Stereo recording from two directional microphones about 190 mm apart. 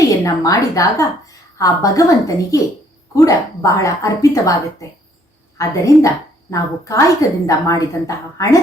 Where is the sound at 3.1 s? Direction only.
15° left (ahead or behind).